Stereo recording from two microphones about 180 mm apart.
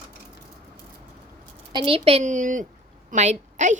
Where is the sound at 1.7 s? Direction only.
30° right (ahead or behind).